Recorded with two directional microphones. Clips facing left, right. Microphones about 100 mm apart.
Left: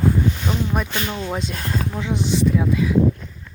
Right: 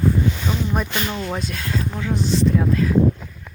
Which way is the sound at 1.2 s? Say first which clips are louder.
Left 1 dB; 20° left (ahead or behind).